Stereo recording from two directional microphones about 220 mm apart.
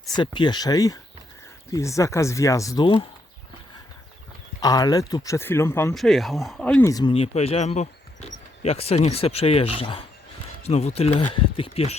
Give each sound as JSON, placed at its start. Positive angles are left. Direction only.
{"t": 0.2, "sound": "speech", "side_deg": 20}
{"t": 4.6, "sound": "speech", "side_deg": 15}
{"t": 6.0, "sound": "speech", "side_deg": 0}